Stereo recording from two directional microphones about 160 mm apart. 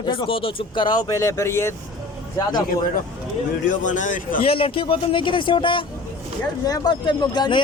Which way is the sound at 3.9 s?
50° left (ahead or behind).